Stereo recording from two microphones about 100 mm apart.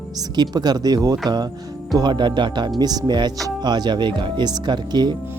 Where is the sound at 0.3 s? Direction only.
45° right (ahead or behind).